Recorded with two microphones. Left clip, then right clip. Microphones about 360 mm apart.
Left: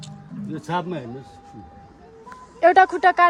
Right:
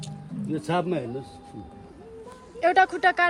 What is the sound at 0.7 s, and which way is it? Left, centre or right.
Speech, centre.